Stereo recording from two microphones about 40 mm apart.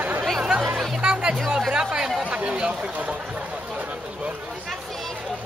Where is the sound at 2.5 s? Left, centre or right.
Right.